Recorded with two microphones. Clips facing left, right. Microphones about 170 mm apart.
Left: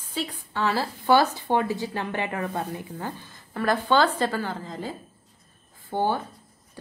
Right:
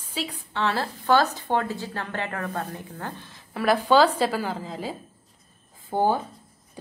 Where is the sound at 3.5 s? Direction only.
10° right (ahead or behind).